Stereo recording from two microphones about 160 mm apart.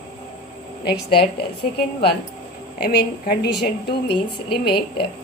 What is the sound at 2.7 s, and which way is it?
A woman's voice, 85° left.